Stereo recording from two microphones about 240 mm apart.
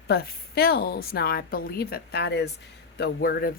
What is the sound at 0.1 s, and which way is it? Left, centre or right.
A woman's voice, left.